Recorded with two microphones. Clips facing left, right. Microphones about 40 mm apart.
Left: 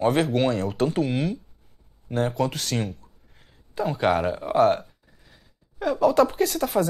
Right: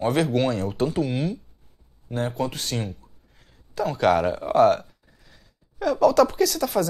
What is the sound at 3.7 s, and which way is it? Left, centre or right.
Speech, left.